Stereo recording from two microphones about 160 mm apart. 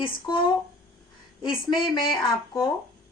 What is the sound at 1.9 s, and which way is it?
Speech, 30° left (ahead or behind).